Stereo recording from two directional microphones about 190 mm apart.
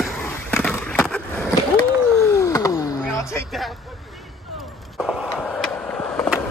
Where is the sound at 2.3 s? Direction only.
15° left (ahead or behind).